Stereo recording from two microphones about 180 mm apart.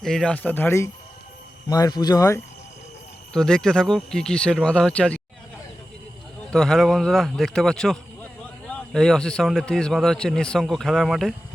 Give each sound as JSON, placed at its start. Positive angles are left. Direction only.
{"t": 0.0, "sound": "speech", "side_deg": 5}
{"t": 3.3, "sound": "speech", "side_deg": 5}
{"t": 6.5, "sound": "speech", "side_deg": 5}